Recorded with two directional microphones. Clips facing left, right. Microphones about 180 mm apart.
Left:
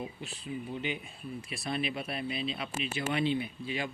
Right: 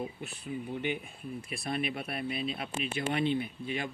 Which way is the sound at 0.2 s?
55° right (ahead or behind).